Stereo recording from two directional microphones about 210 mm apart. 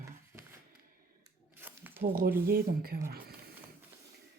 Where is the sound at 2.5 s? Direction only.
45° right (ahead or behind).